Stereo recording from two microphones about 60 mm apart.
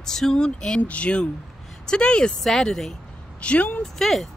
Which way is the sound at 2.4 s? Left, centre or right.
Centre.